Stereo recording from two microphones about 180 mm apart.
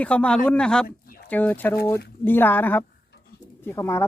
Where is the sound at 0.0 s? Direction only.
5° left (ahead or behind).